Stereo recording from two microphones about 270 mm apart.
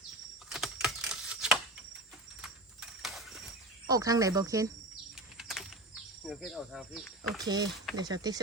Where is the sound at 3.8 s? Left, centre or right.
Centre.